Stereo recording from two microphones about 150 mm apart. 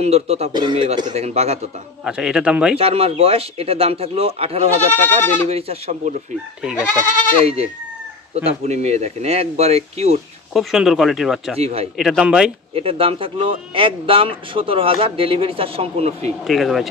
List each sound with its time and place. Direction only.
0.0 s speech: 45° right (ahead or behind)
0.5 s a man's voice: 30° right (ahead or behind)
1.0 s speech: 45° right (ahead or behind)
2.0 s speech: 5° right (ahead or behind)
2.8 s a man's voice: 40° right (ahead or behind)
6.8 s speech: 10° left (ahead or behind)
7.4 s speech: 45° right (ahead or behind)
10.5 s speech: centre (ahead or behind)
11.5 s speech: 40° right (ahead or behind)
12.0 s speech: 5° right (ahead or behind)
12.7 s a man's voice: 40° right (ahead or behind)
16.4 s speech: centre (ahead or behind)